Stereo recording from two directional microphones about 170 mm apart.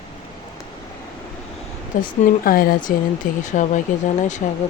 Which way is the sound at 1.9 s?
50° left (ahead or behind).